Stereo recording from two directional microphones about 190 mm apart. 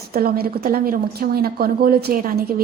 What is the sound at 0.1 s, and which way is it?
A woman's voice, 50° right (ahead or behind).